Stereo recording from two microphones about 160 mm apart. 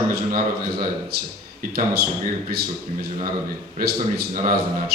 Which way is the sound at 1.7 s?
70° right (ahead or behind).